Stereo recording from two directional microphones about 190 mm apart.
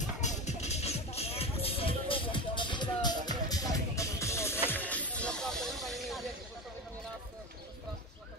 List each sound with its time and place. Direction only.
0.2 s music: 40° left (ahead or behind); by 6.3 s centre (ahead or behind)